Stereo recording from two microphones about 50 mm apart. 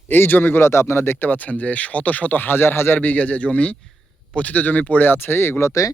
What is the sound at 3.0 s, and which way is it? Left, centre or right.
Speech, left.